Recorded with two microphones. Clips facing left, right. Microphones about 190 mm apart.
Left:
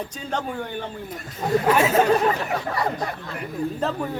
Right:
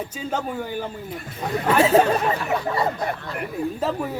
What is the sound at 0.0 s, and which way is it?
Speech, 5° right (ahead or behind).